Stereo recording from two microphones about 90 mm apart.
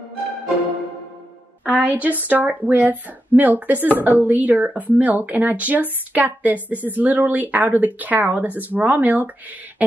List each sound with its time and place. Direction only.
1.6 s a woman's voice: 20° right (ahead or behind)